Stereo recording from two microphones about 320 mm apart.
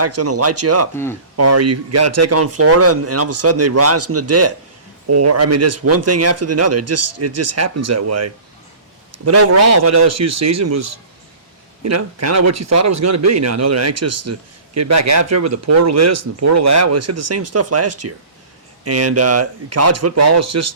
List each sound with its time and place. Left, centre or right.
0.0 s speech: right